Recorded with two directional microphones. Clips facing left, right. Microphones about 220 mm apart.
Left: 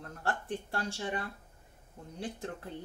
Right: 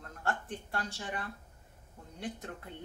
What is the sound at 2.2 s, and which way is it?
Speech, 30° left (ahead or behind).